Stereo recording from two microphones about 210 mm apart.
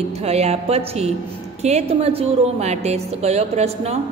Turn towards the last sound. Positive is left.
turn(degrees=-30)  # may be behind; listen again after turning